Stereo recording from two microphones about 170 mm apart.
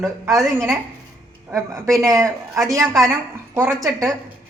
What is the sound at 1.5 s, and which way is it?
A woman's voice, 15° right (ahead or behind).